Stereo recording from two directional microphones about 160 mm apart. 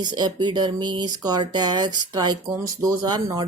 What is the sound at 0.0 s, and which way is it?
Speech, 25° right (ahead or behind).